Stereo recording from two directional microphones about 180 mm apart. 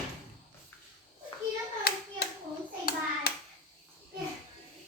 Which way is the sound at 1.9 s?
55° left (ahead or behind).